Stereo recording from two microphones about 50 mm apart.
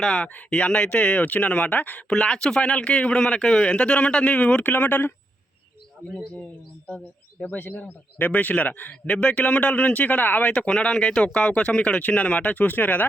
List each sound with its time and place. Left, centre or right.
0.0 s speech: centre
0.3 s speech: left
2.0 s speech: centre
4.7 s speech: left
6.3 s speech: left
7.5 s speech: left
7.8 s speech: left
10.5 s speech: centre; by 13.1 s left